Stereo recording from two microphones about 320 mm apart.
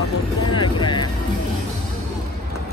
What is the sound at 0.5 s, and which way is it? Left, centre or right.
Music, centre.